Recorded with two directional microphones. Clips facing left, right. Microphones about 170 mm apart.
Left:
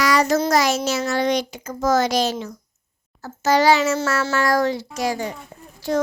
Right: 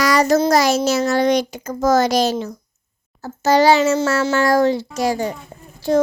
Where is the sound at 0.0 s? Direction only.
40° right (ahead or behind).